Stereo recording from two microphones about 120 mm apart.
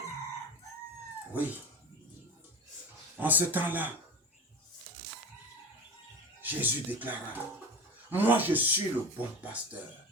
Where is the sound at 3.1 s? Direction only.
15° right (ahead or behind).